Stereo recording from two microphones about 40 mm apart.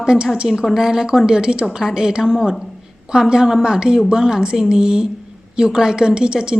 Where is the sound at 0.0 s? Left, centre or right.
Right.